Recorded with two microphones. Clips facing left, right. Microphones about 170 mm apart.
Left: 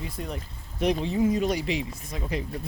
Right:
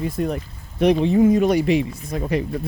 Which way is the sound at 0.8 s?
65° right (ahead or behind).